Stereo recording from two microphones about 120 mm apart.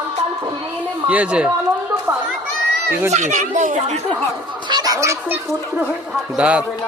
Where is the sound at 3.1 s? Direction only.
85° right.